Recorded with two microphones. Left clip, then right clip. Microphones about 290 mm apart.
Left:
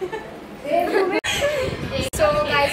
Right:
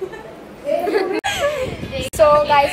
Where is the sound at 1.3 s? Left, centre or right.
Right.